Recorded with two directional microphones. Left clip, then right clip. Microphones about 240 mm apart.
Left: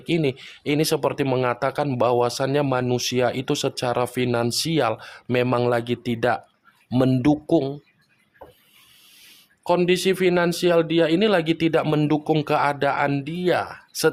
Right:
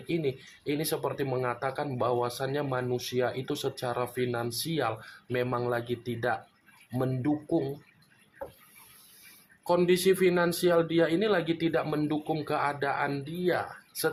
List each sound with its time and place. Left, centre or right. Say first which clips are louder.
0.1 s speech: left 8 dB; left
9.6 s speech: left 5 dB; left